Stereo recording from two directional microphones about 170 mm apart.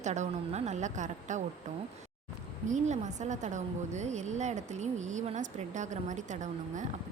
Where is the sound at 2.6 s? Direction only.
45° right (ahead or behind).